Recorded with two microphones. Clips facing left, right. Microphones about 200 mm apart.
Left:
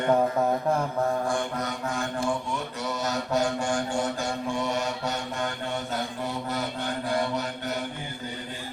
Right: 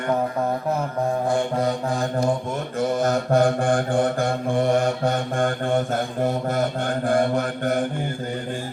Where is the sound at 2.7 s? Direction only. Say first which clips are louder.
Right 11 dB; 50° right (ahead or behind).